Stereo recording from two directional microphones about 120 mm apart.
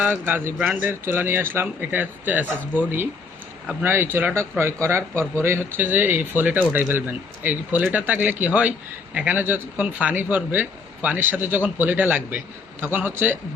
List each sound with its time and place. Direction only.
0.0 s speech: 15° right (ahead or behind)